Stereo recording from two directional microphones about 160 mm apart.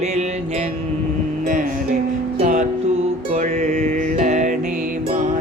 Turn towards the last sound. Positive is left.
turn(degrees=-50)  # may be behind; listen again after turning